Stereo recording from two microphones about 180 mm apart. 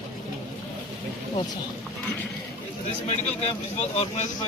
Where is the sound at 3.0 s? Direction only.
35° left (ahead or behind).